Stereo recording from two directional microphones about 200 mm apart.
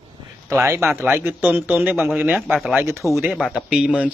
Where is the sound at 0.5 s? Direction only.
15° right (ahead or behind).